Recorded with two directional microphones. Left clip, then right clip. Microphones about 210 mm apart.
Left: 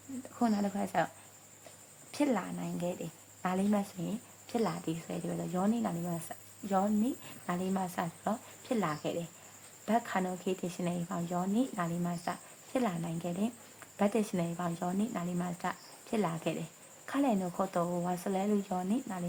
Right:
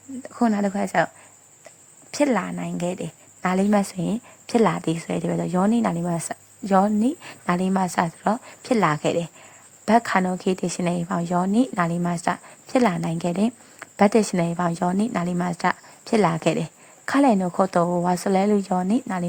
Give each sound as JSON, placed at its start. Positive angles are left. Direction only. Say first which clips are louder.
{"t": 0.3, "sound": "a woman's voice", "louder": "right 10 dB", "side_deg": -35}